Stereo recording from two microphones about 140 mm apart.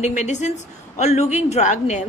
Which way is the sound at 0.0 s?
55° left (ahead or behind).